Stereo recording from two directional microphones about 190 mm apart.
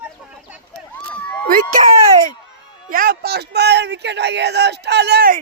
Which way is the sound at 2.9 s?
50° right (ahead or behind).